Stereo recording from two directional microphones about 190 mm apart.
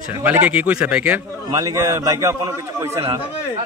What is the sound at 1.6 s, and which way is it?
A man's voice, 15° right (ahead or behind).